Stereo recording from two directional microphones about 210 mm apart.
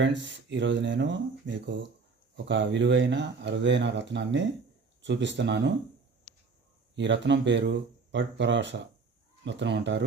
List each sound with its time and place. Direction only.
0.0 s speech: 60° right (ahead or behind)
6.9 s speech: 60° right (ahead or behind)